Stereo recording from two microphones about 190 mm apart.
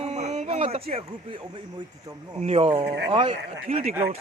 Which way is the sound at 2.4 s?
35° right (ahead or behind).